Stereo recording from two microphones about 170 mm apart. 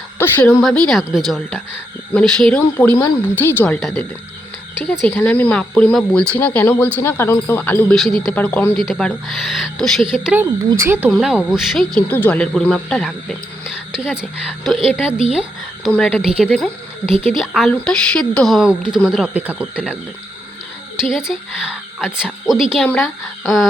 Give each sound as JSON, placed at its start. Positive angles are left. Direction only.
{"t": 0.2, "sound": "speech", "side_deg": 15}
{"t": 0.6, "sound": "speech", "side_deg": 0}
{"t": 3.8, "sound": "speech", "side_deg": 0}
{"t": 11.1, "sound": "speech", "side_deg": 0}
{"t": 12.0, "sound": "speech", "side_deg": 10}
{"t": 15.9, "sound": "speech", "side_deg": 5}